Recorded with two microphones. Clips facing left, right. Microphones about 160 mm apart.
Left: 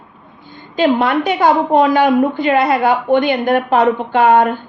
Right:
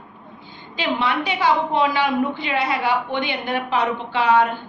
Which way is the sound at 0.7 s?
50° left (ahead or behind).